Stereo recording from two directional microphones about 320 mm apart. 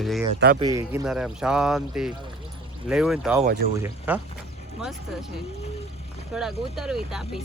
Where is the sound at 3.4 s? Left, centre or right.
Right.